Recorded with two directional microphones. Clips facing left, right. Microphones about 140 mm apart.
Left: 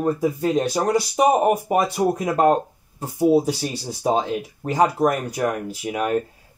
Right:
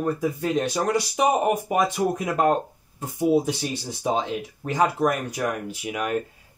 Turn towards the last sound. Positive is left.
turn(degrees=35)  # may be behind; listen again after turning